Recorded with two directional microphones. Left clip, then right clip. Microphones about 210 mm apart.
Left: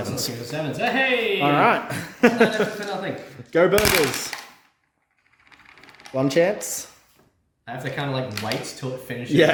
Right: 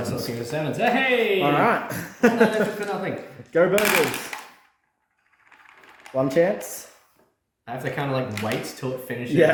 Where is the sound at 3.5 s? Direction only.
55° left (ahead or behind).